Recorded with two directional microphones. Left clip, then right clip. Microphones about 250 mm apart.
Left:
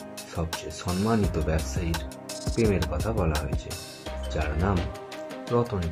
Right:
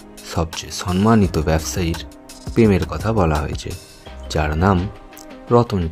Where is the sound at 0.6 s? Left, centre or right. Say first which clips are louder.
Right 9 dB; right.